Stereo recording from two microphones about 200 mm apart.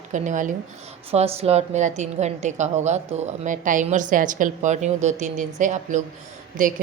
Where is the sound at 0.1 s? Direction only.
40° right (ahead or behind).